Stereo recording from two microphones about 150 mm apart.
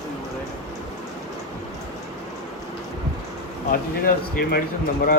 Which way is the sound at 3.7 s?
80° left.